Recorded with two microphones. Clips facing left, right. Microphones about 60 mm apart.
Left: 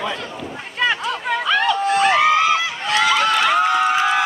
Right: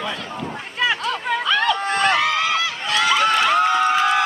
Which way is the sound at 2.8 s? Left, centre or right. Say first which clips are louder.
Right 1 dB; centre.